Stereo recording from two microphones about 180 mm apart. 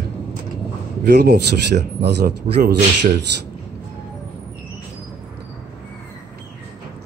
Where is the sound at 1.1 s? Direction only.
70° right (ahead or behind).